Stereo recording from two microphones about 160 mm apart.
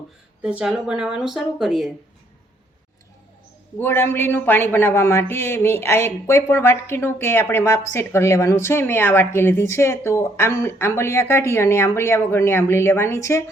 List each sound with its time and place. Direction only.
0.6 s speech: 5° right (ahead or behind)
3.8 s a woman's voice: 15° left (ahead or behind)